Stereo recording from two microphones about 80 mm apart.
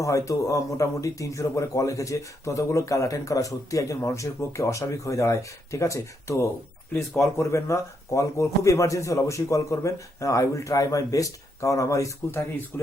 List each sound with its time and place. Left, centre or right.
0.0 s a man's voice: left
12.7 s speech: left